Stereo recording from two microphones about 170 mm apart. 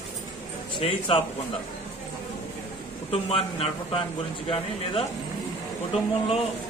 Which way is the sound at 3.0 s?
35° left (ahead or behind).